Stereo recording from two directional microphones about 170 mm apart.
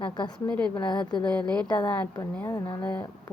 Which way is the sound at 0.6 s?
10° left (ahead or behind).